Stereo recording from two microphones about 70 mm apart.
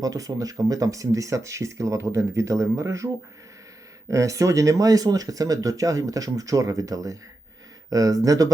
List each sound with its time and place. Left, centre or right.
0.0 s speech: right
4.1 s speech: right